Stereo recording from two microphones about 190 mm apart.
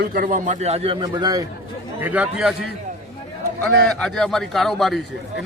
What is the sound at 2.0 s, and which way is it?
Speech, 5° right (ahead or behind).